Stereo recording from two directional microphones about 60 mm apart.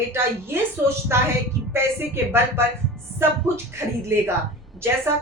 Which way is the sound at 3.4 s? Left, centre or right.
Right.